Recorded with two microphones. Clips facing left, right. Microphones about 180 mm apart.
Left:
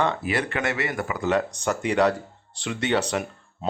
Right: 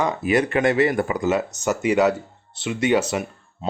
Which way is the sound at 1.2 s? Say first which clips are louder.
Left 2 dB; 5° right (ahead or behind).